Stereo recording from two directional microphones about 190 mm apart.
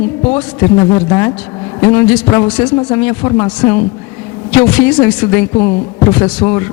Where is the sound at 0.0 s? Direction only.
10° left (ahead or behind).